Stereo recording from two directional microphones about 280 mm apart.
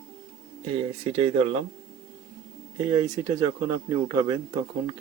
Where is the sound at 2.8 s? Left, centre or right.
Centre.